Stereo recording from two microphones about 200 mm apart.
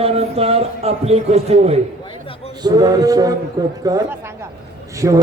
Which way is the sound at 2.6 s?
20° right (ahead or behind).